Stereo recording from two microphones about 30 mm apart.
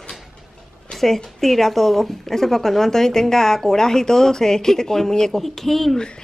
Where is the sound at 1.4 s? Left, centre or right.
Centre.